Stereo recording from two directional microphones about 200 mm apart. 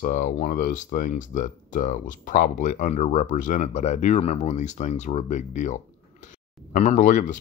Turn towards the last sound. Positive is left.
turn(degrees=40)  # may be behind; listen again after turning